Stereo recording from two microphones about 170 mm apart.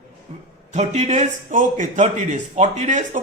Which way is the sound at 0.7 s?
40° right (ahead or behind).